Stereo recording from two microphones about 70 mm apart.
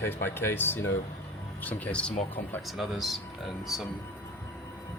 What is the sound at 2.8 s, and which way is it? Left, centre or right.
Speech, centre.